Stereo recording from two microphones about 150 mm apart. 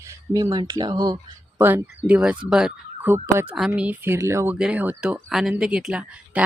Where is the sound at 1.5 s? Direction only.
10° right (ahead or behind).